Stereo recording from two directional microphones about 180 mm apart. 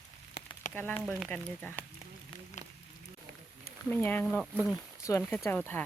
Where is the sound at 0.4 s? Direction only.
65° left (ahead or behind).